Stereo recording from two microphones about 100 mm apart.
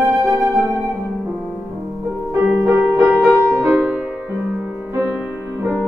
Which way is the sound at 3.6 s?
30° right (ahead or behind).